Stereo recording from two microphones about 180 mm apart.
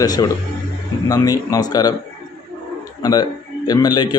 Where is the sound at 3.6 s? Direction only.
20° left (ahead or behind).